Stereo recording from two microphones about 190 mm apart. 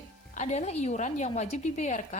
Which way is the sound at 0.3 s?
35° left (ahead or behind).